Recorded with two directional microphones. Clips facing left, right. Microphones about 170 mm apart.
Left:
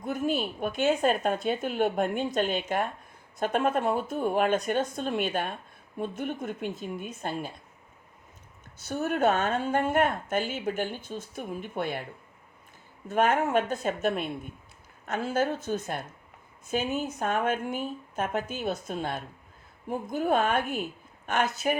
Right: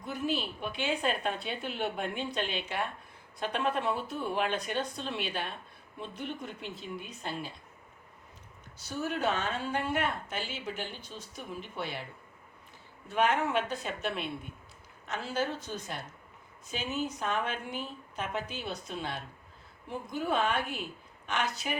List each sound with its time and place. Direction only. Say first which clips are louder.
0.0 s speech: left 5 dB; 50° left (ahead or behind)
8.9 s speech: left 6 dB; 50° left (ahead or behind)
13.1 s speech: left 4 dB; 45° left (ahead or behind)